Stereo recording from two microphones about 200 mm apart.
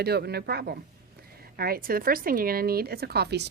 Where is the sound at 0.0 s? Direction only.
50° right (ahead or behind).